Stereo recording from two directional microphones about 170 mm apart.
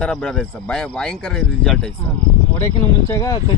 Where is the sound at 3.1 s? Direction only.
20° left (ahead or behind).